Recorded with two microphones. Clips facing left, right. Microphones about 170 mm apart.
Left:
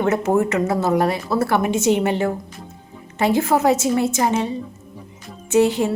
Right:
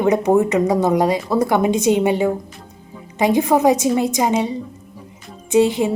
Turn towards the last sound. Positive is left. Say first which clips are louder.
# right 1 dB
turn(degrees=-15)  # may be behind; listen again after turning